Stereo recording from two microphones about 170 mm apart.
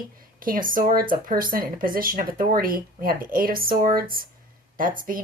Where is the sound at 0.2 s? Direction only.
55° right (ahead or behind).